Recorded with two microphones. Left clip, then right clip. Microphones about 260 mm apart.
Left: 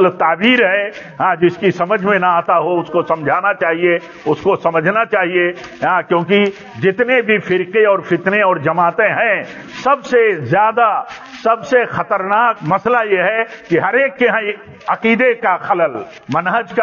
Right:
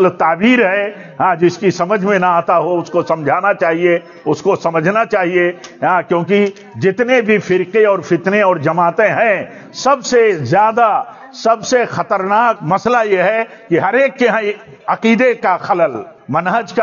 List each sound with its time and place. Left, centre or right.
0.0 s a man's voice: right